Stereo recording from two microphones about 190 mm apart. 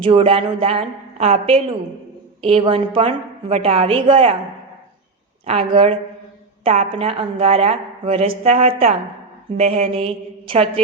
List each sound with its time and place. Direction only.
0.0 s a woman's voice: 30° right (ahead or behind)
5.5 s a woman's voice: 30° right (ahead or behind)